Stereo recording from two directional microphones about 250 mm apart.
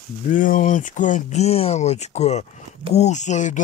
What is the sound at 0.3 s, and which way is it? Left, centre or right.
Speech, left.